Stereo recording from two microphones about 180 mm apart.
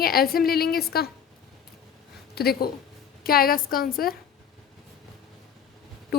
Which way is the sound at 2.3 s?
60° left (ahead or behind).